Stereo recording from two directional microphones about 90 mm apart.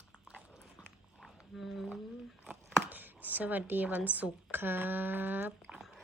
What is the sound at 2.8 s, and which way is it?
Speech, 20° right (ahead or behind).